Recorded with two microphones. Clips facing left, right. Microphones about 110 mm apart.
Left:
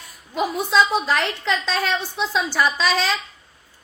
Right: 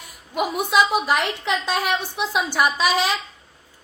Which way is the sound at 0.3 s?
15° right (ahead or behind).